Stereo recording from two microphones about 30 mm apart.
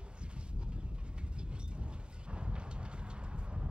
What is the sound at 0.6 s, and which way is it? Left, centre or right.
Vehicle, right.